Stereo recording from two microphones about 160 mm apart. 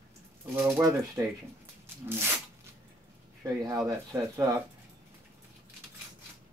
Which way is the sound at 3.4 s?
20° right (ahead or behind).